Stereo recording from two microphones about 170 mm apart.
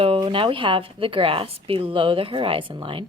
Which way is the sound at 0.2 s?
30° right (ahead or behind).